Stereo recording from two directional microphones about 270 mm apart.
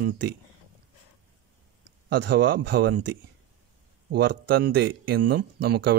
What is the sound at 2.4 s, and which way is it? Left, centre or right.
Speech, right.